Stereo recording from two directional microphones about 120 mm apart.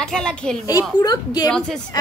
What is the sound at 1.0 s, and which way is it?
Speech, 35° left (ahead or behind).